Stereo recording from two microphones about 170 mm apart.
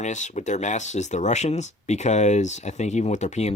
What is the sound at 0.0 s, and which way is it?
Speech, 45° left (ahead or behind).